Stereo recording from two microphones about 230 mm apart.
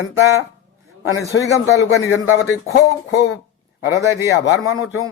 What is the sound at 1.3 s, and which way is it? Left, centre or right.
Speech, left.